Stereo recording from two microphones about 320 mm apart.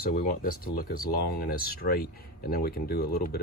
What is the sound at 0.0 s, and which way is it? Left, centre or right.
Speech, left.